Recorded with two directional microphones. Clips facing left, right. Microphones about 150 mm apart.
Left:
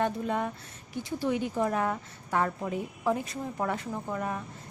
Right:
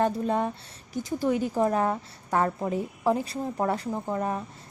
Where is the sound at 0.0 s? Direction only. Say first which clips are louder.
Right 4 dB; 35° right (ahead or behind).